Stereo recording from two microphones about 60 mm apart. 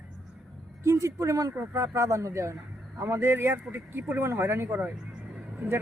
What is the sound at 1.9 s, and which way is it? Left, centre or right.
A man's voice, right.